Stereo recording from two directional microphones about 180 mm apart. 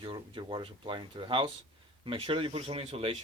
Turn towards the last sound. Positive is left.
turn(degrees=-30)  # may be behind; listen again after turning